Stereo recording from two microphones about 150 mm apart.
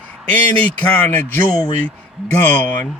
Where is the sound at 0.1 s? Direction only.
10° left (ahead or behind).